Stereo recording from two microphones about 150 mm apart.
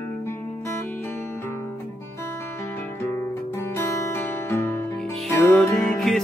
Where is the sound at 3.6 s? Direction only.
15° left (ahead or behind).